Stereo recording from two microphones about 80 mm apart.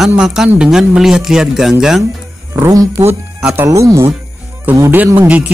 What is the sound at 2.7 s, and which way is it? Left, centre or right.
Speech, right.